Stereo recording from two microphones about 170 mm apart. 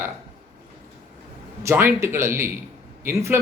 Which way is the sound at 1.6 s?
15° right (ahead or behind).